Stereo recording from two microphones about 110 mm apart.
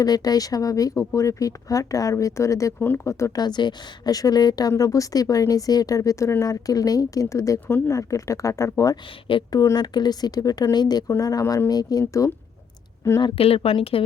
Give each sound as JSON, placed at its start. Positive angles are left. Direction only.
{"t": 0.0, "sound": "speech", "side_deg": 35}
{"t": 3.4, "sound": "speech", "side_deg": 40}
{"t": 13.2, "sound": "a woman's voice", "side_deg": 55}